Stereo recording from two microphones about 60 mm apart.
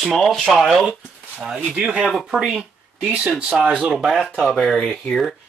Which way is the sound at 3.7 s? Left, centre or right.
Centre.